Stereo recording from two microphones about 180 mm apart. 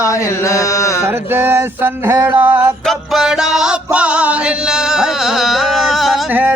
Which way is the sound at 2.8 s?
Centre (ahead or behind).